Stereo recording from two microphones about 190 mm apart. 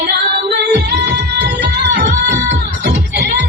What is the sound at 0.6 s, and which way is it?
Music, 60° right (ahead or behind).